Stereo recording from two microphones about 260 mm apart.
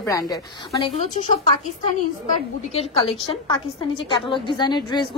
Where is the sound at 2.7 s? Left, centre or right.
Left.